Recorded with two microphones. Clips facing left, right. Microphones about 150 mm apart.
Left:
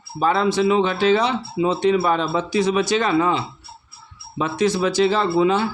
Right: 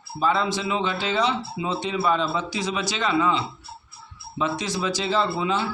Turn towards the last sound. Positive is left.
turn(degrees=60)  # may be behind; listen again after turning